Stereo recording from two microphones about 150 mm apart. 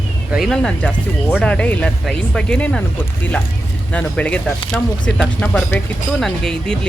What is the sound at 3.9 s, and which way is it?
Speech, 10° left (ahead or behind).